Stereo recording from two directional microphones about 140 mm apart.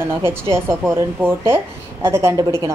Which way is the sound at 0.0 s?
20° right (ahead or behind).